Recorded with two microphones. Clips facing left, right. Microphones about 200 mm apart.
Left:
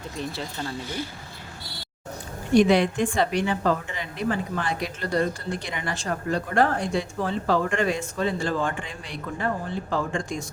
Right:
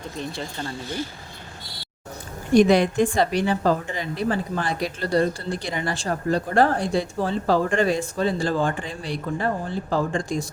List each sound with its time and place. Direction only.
2.6 s a woman's voice: 40° right (ahead or behind)